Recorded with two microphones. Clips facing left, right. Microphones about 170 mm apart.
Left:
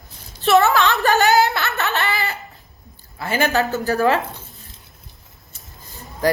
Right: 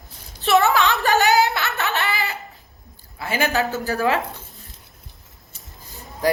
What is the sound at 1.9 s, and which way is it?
Laughter, 15° right (ahead or behind).